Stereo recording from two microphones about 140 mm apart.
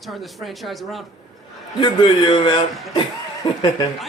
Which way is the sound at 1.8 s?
35° left (ahead or behind).